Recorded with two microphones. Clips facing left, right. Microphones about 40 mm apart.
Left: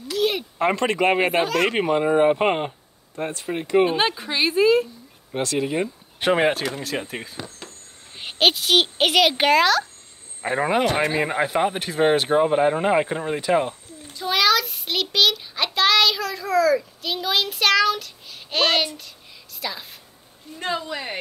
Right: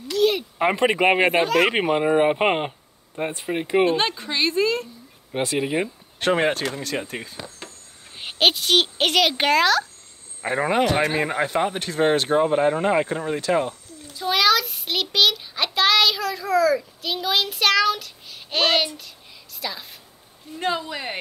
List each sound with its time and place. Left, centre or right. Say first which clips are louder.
0.1 s a sound: right 3 dB; centre
0.6 s speech: right 1 dB; centre
1.3 s speech: right 2 dB; centre
3.8 s speech: even; centre
5.3 s speech: even; centre
6.1 s a child's voice: left 1 dB; centre
14.1 s a child's voice: even; centre
20.5 s speech: right 1 dB; centre